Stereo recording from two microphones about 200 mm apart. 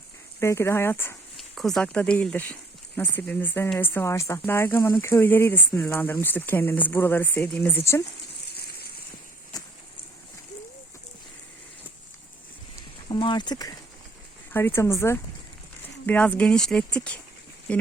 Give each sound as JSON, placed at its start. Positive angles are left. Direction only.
{"t": 0.3, "sound": "speech", "side_deg": 15}
{"t": 1.4, "sound": "speech", "side_deg": 0}
{"t": 13.1, "sound": "speech", "side_deg": 25}